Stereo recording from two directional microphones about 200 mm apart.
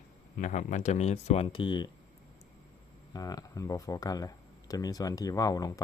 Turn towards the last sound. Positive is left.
turn(degrees=20)  # may be behind; listen again after turning